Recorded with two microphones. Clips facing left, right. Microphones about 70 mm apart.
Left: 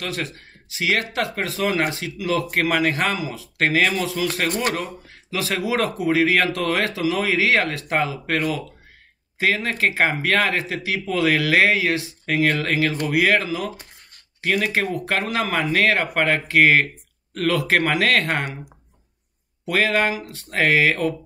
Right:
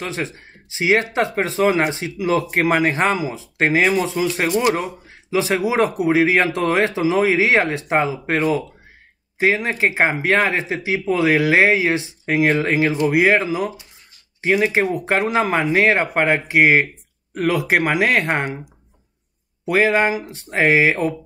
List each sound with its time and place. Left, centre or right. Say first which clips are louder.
0.0 s speech: right 2 dB; right
19.6 s speech: right 4 dB; right